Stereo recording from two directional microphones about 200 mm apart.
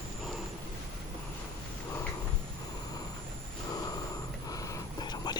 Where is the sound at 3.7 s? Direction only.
20° left (ahead or behind).